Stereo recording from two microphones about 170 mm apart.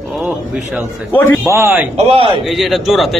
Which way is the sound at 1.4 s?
15° right (ahead or behind).